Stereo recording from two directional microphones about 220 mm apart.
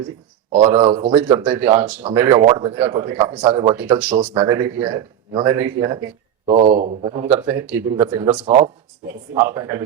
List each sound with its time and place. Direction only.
0.5 s speech: 25° right (ahead or behind)
6.5 s speech: 25° right (ahead or behind)
8.4 s speech: 35° right (ahead or behind)
9.3 s speech: 15° right (ahead or behind)